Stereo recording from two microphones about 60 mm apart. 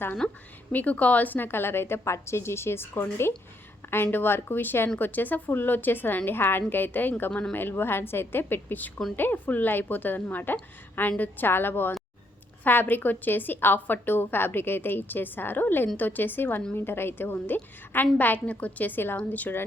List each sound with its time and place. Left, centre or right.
0.2 s a woman's voice: centre